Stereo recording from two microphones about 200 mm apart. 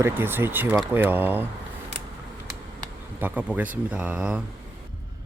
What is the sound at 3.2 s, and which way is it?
Speech, 5° right (ahead or behind).